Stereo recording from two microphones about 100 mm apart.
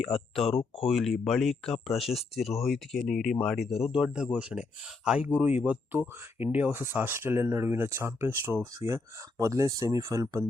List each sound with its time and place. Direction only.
0.0 s speech: centre (ahead or behind); by 10.5 s 30° right (ahead or behind)